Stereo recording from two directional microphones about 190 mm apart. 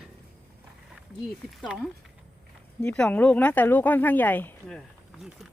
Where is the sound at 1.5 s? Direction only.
Centre (ahead or behind).